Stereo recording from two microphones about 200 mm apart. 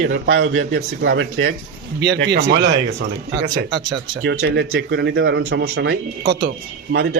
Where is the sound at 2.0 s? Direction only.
60° right (ahead or behind).